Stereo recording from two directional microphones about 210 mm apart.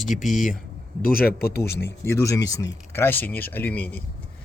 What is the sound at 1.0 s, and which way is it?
Speech, 45° left (ahead or behind).